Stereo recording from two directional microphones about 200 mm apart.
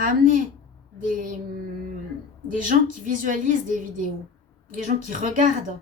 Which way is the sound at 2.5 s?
40° right (ahead or behind).